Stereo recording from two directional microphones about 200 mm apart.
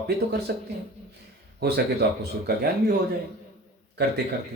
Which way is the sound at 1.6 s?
55° right (ahead or behind).